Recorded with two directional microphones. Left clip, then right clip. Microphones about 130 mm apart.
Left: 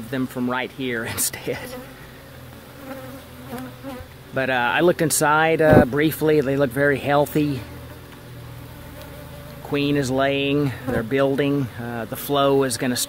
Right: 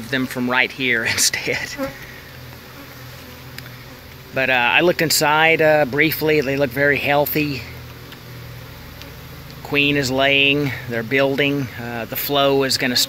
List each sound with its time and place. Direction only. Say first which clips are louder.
0.3 s speech: right 9 dB; 10° left (ahead or behind); by 1.8 s 30° left (ahead or behind)
4.3 s speech: right 4 dB; 35° left (ahead or behind)
9.7 s speech: right 4 dB; 35° left (ahead or behind)